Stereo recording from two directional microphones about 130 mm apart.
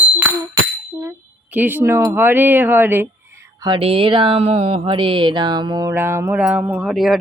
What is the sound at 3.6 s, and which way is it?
Speech, 45° right (ahead or behind).